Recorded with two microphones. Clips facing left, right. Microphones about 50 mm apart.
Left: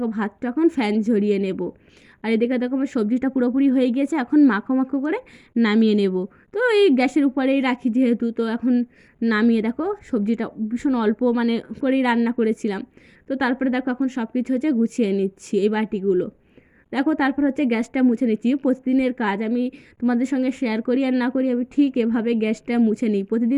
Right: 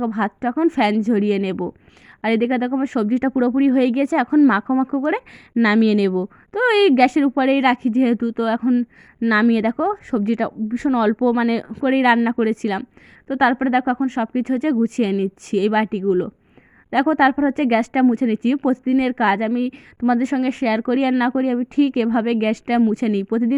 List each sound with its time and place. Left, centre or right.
0.0 s a woman's voice: right
3.1 s speech: right
4.8 s a woman's voice: right
5.6 s speech: right
6.5 s a woman's voice: right
8.6 s speech: centre
9.3 s a woman's voice: right
11.9 s speech: right
13.2 s a woman's voice: right
21.8 s speech: right